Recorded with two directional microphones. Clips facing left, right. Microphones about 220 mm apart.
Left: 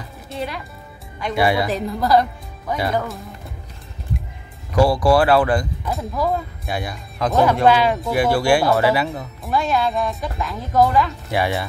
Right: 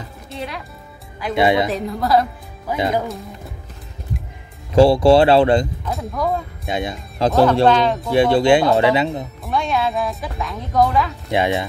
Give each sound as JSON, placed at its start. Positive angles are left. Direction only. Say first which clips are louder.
{"t": 0.3, "sound": "music", "louder": "left 2 dB", "side_deg": 0}
{"t": 1.3, "sound": "speech", "louder": "right 3 dB", "side_deg": -20}
{"t": 1.7, "sound": "speech", "louder": "even", "side_deg": 0}
{"t": 2.8, "sound": "speech", "louder": "right 2 dB", "side_deg": -15}
{"t": 3.1, "sound": "speech", "louder": "right 3 dB", "side_deg": 0}
{"t": 4.7, "sound": "speech", "louder": "right 4 dB", "side_deg": -25}
{"t": 5.9, "sound": "speech", "louder": "even", "side_deg": 0}
{"t": 6.7, "sound": "speech", "louder": "right 4 dB", "side_deg": -20}
{"t": 7.6, "sound": "speech", "louder": "right 1 dB", "side_deg": 10}
{"t": 8.1, "sound": "speech", "louder": "right 5 dB", "side_deg": -25}
{"t": 9.4, "sound": "speech", "louder": "left 1 dB", "side_deg": 0}
{"t": 11.2, "sound": "speech", "louder": "right 3 dB", "side_deg": -20}